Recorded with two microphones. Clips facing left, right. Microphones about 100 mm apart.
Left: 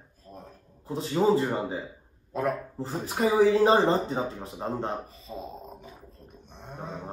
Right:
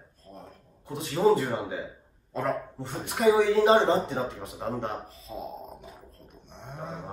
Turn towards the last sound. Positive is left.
turn(degrees=0)  # may be behind; listen again after turning